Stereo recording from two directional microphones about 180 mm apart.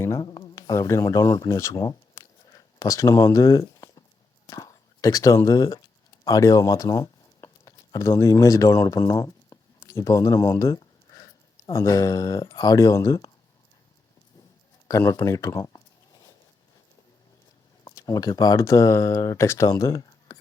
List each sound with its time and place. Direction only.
0.0 s speech: 20° left (ahead or behind)
14.8 s a sound: 20° left (ahead or behind)
17.9 s speech: 20° left (ahead or behind)